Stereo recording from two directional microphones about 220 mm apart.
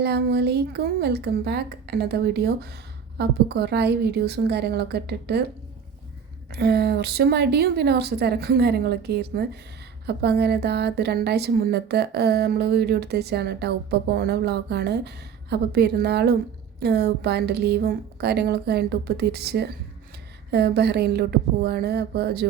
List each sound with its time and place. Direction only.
0.0 s a woman's voice: 45° right (ahead or behind)
6.5 s a woman's voice: 45° right (ahead or behind)